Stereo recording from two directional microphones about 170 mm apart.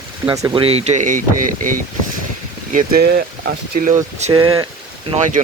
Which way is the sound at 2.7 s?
65° right (ahead or behind).